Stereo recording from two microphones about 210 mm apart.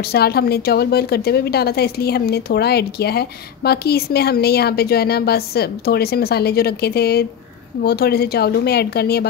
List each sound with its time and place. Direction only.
0.0 s speech: 50° left (ahead or behind)